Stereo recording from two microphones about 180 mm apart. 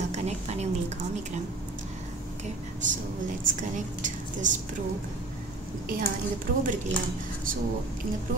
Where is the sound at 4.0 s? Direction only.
45° right (ahead or behind).